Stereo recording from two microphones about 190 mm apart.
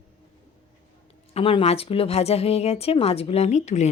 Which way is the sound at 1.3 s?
30° left (ahead or behind).